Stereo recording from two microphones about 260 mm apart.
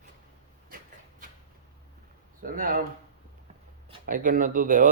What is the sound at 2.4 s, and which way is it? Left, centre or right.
Speech, right.